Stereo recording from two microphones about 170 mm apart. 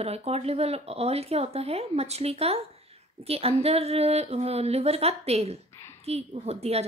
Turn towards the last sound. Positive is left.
turn(degrees=-40)  # may be behind; listen again after turning